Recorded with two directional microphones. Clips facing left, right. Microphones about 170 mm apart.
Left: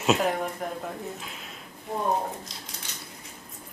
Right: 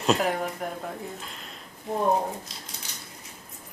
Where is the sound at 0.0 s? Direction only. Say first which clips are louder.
Even; centre (ahead or behind).